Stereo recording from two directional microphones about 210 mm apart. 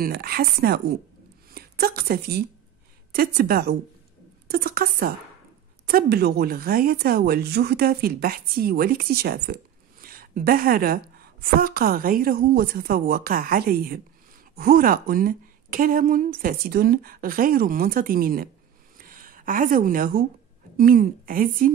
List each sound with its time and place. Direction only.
0.0 s a woman's voice: 45° right (ahead or behind)
18.9 s a sound: 45° right (ahead or behind)
20.7 s a woman's voice: 40° right (ahead or behind)